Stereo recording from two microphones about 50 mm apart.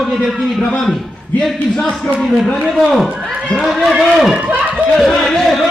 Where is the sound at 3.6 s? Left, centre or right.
Centre.